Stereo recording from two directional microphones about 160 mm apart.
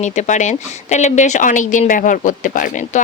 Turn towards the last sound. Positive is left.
turn(degrees=55)  # may be behind; listen again after turning